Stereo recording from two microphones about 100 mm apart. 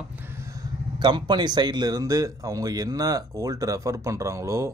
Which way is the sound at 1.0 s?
50° right (ahead or behind).